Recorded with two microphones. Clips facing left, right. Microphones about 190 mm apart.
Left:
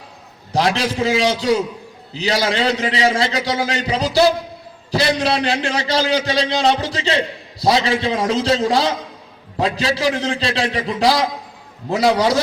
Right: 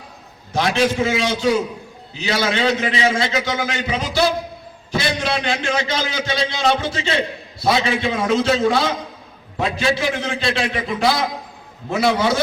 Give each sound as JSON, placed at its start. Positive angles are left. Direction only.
{"t": 0.5, "sound": "a man's voice", "side_deg": 35}